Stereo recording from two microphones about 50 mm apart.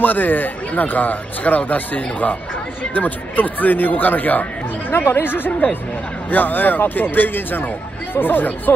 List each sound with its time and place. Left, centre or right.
0.0 s speech: left